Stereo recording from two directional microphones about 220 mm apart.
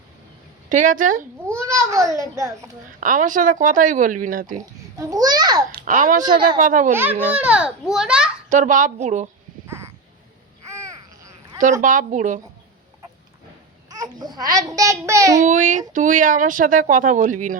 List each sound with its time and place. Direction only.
0.7 s speech: 35° right (ahead or behind)
1.6 s a child's voice: 15° right (ahead or behind)
3.0 s speech: 35° right (ahead or behind)
4.6 s a child's voice: 15° right (ahead or behind)
5.8 s speech: 35° right (ahead or behind)
6.9 s a child's voice: 10° right (ahead or behind)
8.4 s speech: 35° right (ahead or behind)
9.6 s a sound: 10° right (ahead or behind)
10.7 s babbling: 15° right (ahead or behind)
11.8 s speech: 35° right (ahead or behind)
13.9 s a child's voice: 15° right (ahead or behind)
15.4 s speech: 35° right (ahead or behind)